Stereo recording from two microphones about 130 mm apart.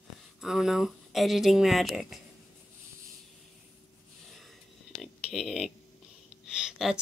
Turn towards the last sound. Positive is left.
turn(degrees=-5)  # may be behind; listen again after turning